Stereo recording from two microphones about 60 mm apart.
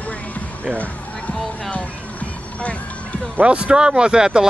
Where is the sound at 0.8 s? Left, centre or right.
Left.